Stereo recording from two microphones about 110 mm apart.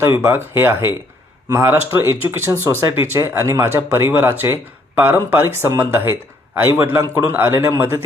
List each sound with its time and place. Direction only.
0.0 s speech: 25° right (ahead or behind)